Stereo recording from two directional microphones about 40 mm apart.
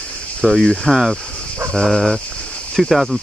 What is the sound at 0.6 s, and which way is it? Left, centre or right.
Speech, centre.